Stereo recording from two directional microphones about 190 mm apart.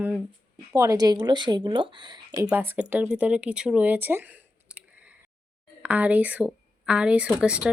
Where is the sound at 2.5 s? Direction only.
10° right (ahead or behind).